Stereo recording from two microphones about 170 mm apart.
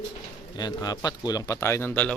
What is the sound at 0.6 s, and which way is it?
A man's voice, 25° left (ahead or behind).